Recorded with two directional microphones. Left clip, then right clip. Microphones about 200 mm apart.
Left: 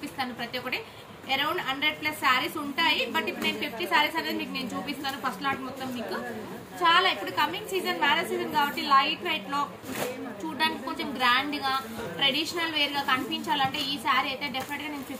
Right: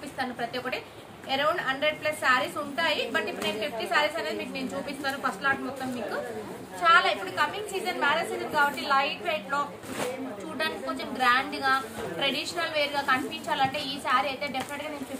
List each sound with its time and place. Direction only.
1.3 s a woman's voice: 20° right (ahead or behind)
6.8 s a woman's voice: 20° right (ahead or behind)
10.6 s a woman's voice: 20° right (ahead or behind)